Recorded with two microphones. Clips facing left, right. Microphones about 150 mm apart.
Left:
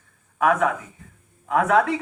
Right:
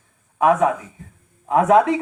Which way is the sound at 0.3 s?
25° right (ahead or behind).